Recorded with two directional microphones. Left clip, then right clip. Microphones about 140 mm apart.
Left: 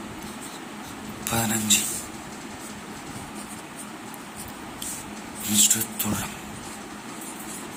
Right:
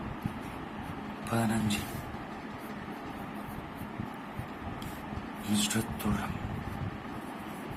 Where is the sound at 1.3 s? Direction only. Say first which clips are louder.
Left 8 dB; 10° left (ahead or behind).